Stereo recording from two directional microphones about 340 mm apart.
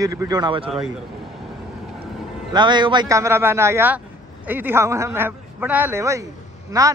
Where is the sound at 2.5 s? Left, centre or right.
Centre.